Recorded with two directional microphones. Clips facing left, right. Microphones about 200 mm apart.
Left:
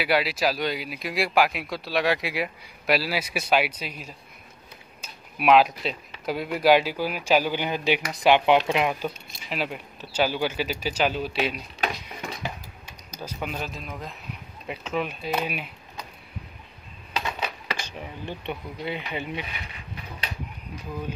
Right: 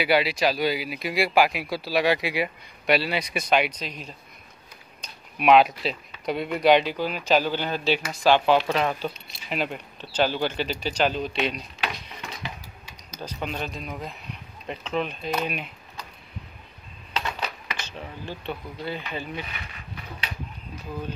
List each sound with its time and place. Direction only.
0.0 s speech: centre (ahead or behind)
11.8 s a sound: 45° left (ahead or behind)
13.2 s speech: 5° left (ahead or behind)
17.1 s coin: 10° left (ahead or behind)
17.7 s speech: 15° left (ahead or behind)